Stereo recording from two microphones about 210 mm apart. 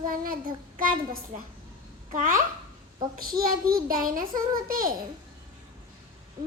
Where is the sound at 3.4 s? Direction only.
45° right (ahead or behind).